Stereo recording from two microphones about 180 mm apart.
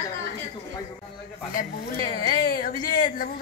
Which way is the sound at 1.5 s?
55° left (ahead or behind).